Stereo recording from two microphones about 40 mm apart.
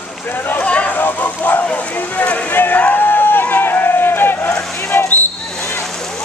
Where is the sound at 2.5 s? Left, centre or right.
Left.